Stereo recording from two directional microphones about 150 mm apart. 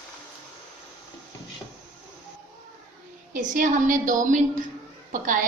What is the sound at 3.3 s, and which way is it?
A woman's voice, 60° right (ahead or behind).